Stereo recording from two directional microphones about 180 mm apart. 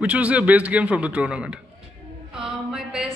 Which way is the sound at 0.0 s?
5° right (ahead or behind).